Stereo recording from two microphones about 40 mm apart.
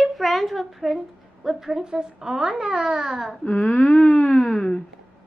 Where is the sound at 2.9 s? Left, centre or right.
Centre.